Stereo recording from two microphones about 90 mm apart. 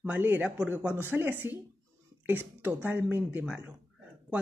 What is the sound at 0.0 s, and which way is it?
Speech, 20° right (ahead or behind).